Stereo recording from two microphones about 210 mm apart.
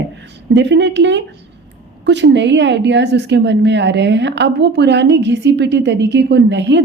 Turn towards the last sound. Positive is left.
turn(degrees=-55)  # may be behind; listen again after turning